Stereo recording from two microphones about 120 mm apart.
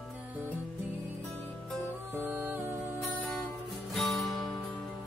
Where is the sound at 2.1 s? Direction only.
15° right (ahead or behind).